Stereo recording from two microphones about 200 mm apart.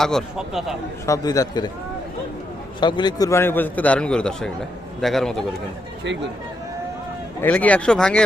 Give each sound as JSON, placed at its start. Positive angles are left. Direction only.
{"t": 0.0, "sound": "speech", "side_deg": 0}
{"t": 1.0, "sound": "a man's voice", "side_deg": 15}
{"t": 2.8, "sound": "a man's voice", "side_deg": 20}
{"t": 7.4, "sound": "speech", "side_deg": 10}